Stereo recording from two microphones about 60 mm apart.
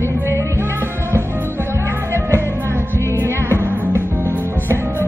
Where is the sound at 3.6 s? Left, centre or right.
Right.